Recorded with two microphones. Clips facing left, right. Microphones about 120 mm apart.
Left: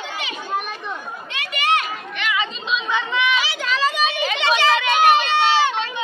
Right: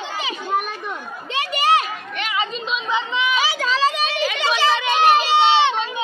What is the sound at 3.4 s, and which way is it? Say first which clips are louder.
Children playing: right 3 dB; 35° right (ahead or behind).